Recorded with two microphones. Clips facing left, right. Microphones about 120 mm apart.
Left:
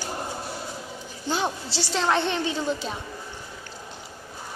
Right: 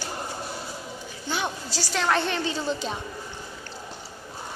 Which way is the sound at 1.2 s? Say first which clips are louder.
Left 3 dB; 30° left (ahead or behind).